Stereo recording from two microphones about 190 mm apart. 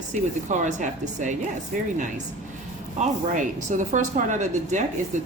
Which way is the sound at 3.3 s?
40° right (ahead or behind).